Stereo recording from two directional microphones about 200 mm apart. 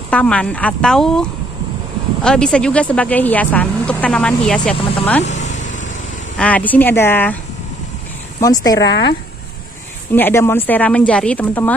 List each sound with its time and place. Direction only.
0.1 s speech: 5° left (ahead or behind)
2.2 s speech: 5° left (ahead or behind)
5.2 s vehicle: 35° left (ahead or behind)
6.3 s speech: 5° left (ahead or behind)
8.4 s speech: 15° left (ahead or behind)
8.8 s speech: 60° left (ahead or behind)
10.1 s speech: 10° left (ahead or behind)